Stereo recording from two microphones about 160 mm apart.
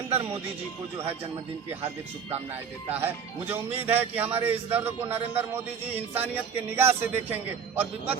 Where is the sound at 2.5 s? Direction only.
15° right (ahead or behind).